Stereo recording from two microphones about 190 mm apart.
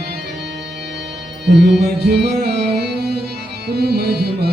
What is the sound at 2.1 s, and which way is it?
Music, 60° right (ahead or behind).